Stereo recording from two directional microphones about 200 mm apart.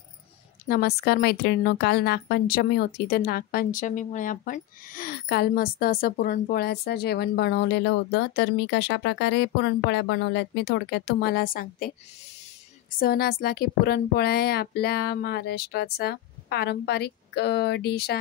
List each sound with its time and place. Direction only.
0.7 s a woman's voice: 50° left (ahead or behind)
13.0 s a woman's voice: 50° left (ahead or behind)